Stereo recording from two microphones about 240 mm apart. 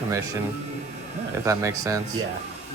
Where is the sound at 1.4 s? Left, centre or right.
Centre.